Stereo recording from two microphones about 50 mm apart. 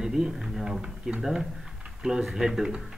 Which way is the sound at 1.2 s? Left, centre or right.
Centre.